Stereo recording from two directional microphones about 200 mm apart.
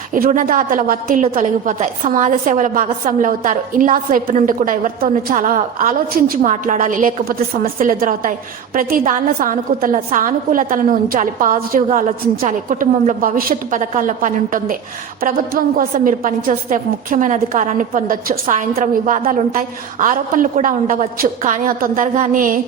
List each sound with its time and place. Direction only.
0.1 s a woman's voice: 40° right (ahead or behind)